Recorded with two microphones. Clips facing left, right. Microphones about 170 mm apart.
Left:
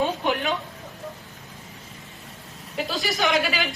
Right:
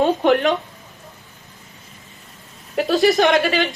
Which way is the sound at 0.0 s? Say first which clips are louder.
Right 8 dB; 45° right (ahead or behind).